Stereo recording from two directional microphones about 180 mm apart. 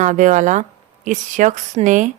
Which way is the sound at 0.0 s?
40° right (ahead or behind).